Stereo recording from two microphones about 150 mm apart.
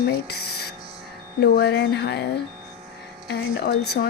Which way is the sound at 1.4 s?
90° left.